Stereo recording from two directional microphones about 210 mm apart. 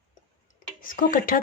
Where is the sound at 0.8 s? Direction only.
40° left (ahead or behind).